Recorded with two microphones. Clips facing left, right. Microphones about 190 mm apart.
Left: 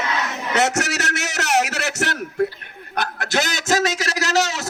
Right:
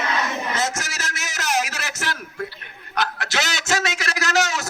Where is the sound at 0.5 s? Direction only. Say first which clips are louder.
Left 6 dB; 70° left (ahead or behind).